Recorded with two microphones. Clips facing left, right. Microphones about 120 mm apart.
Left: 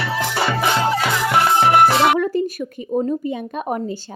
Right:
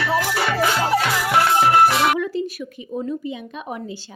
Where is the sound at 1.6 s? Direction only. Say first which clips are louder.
Left 2 dB; 30° left (ahead or behind).